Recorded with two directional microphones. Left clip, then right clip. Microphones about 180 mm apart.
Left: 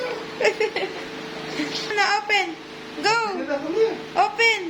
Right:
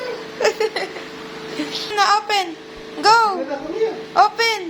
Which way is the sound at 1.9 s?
15° right (ahead or behind).